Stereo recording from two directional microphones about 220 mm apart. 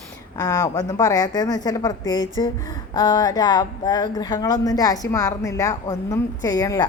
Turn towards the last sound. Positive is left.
turn(degrees=15)  # may be behind; listen again after turning